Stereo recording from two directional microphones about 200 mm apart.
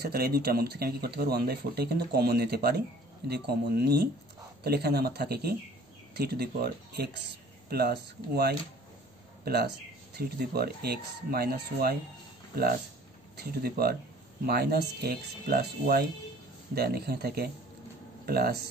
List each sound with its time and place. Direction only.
0.0 s speech: 50° right (ahead or behind)
13.4 s speech: 50° right (ahead or behind)